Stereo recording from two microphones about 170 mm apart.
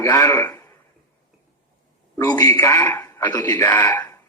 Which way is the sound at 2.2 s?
20° left (ahead or behind).